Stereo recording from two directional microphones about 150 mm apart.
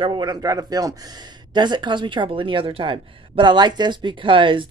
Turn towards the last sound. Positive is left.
turn(degrees=-35)  # may be behind; listen again after turning